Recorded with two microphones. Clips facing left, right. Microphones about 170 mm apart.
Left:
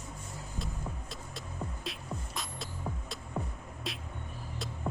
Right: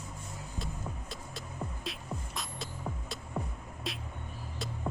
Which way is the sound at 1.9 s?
Centre (ahead or behind).